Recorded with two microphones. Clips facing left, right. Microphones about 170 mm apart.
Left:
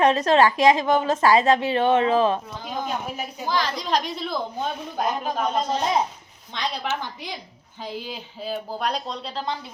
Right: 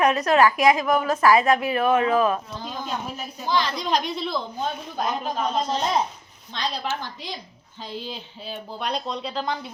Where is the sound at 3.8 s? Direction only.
35° left (ahead or behind).